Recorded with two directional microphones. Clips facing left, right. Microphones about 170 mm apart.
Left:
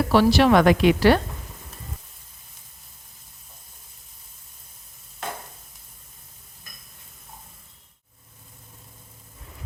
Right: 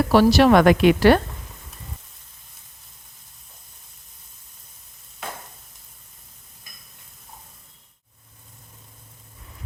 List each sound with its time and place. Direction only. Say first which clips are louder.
0.1 s speech: right 2 dB; 45° right (ahead or behind)